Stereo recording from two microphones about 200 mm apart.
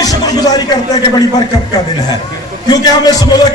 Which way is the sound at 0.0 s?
20° left (ahead or behind).